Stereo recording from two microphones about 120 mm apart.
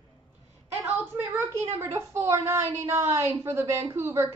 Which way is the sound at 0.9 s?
15° right (ahead or behind).